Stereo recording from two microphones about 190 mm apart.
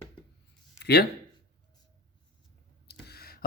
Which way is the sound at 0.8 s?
60° left (ahead or behind).